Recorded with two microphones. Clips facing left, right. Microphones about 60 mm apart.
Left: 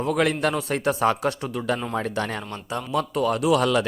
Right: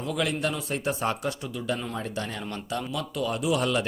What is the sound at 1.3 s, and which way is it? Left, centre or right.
Speech, left.